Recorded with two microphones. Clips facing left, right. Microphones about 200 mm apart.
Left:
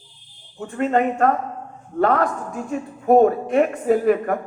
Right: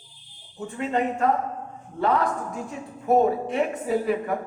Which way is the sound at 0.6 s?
60° left (ahead or behind).